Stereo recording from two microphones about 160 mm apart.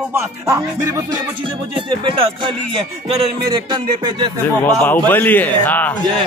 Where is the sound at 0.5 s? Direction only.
20° right (ahead or behind).